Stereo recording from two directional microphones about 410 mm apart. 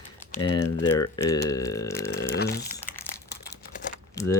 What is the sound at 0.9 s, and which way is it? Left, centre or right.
Speech, centre.